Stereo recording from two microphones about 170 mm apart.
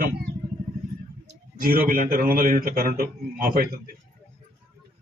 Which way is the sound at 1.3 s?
60° right (ahead or behind).